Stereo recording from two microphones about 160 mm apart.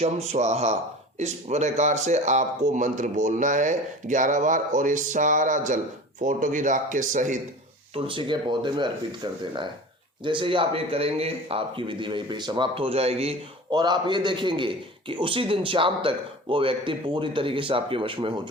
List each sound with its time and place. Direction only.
0.0 s a man's voice: 45° right (ahead or behind)
7.9 s a man's voice: 35° right (ahead or behind)
13.7 s a man's voice: 30° right (ahead or behind)